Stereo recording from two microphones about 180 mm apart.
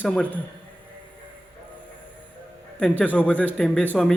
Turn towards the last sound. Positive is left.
turn(degrees=5)  # may be behind; listen again after turning